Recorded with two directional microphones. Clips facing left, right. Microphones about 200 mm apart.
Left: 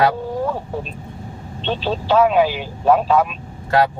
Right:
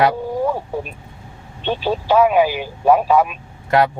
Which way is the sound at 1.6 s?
10° right (ahead or behind).